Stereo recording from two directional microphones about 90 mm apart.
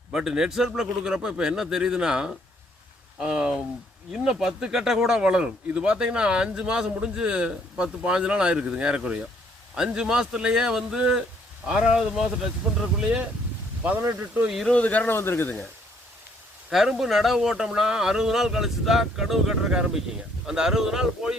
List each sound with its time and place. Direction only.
0.1 s speech: 5° right (ahead or behind)
14.4 s speech: 5° right (ahead or behind)
14.7 s a man's voice: 15° left (ahead or behind)
16.7 s speech: centre (ahead or behind)